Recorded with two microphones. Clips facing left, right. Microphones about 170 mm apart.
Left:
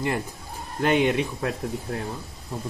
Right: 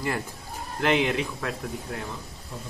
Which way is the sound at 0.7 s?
25° left (ahead or behind).